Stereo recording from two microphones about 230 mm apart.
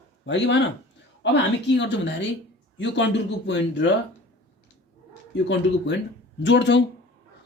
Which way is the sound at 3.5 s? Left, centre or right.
Left.